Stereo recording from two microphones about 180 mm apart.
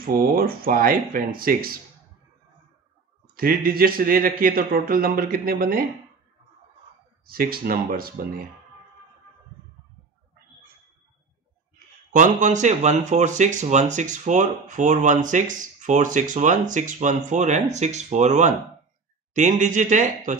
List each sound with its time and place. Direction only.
0.0 s speech: 55° right (ahead or behind)
3.3 s speech: 55° right (ahead or behind)
7.2 s speech: 55° right (ahead or behind)
12.1 s speech: 45° right (ahead or behind)